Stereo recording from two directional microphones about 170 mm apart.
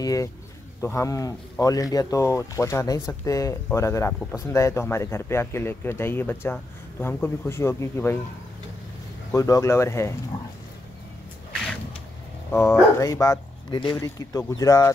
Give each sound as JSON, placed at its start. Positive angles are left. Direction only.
{"t": 0.0, "sound": "speech", "side_deg": 20}
{"t": 9.3, "sound": "speech", "side_deg": 20}
{"t": 12.4, "sound": "speech", "side_deg": 10}